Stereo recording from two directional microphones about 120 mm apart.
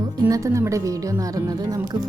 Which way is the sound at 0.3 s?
25° right (ahead or behind).